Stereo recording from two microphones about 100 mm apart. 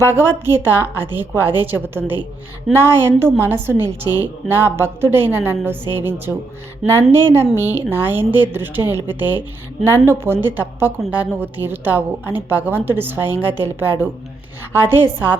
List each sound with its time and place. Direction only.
0.1 s a woman's voice: 20° right (ahead or behind)